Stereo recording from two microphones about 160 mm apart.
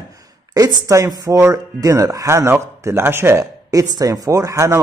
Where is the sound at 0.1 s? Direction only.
25° right (ahead or behind).